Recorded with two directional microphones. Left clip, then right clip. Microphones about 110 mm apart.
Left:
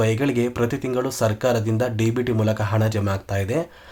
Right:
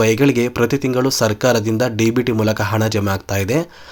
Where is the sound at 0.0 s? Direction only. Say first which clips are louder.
Right 7 dB; 35° right (ahead or behind).